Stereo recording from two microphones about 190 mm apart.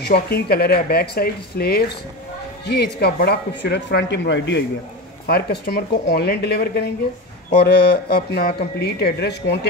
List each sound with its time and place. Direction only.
0.0 s speech: 55° left (ahead or behind)
5.2 s speech: 55° left (ahead or behind)